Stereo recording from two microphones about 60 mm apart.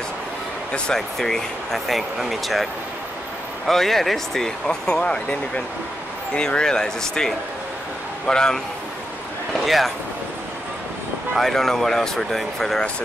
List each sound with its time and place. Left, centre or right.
0.7 s speech: centre
6.3 s speech: centre
9.7 s speech: centre
11.3 s speech: centre